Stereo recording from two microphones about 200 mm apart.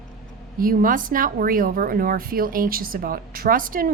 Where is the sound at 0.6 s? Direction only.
45° right (ahead or behind).